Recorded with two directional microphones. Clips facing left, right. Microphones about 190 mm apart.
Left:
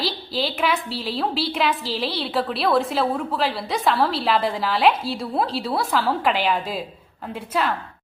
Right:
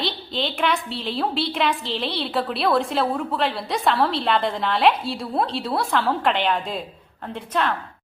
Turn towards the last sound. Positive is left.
turn(degrees=5)  # may be behind; listen again after turning